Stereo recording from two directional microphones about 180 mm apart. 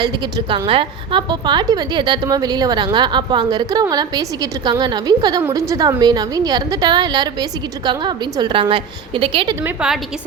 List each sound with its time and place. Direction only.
0.3 s a woman's voice: 25° right (ahead or behind)
9.6 s a woman's voice: 5° right (ahead or behind)